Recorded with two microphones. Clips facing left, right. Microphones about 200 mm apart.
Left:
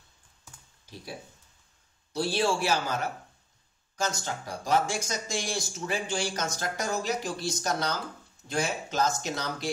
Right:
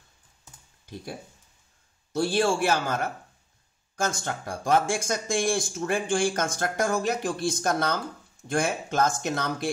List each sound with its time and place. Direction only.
2.1 s speech: 50° right (ahead or behind)